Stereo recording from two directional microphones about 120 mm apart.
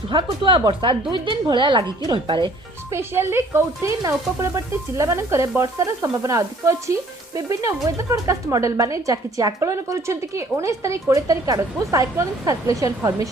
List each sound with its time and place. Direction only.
0.1 s a woman's voice: 40° right (ahead or behind)
2.9 s a woman's voice: 20° right (ahead or behind)